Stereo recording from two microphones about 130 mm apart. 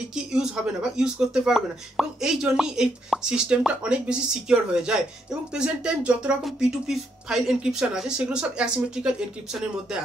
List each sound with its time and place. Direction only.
0.1 s speech: 5° right (ahead or behind)